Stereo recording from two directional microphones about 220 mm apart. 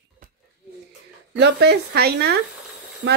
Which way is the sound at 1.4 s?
50° right (ahead or behind).